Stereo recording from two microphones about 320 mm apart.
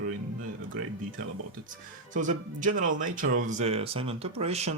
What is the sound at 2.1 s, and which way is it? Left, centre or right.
Speech, right.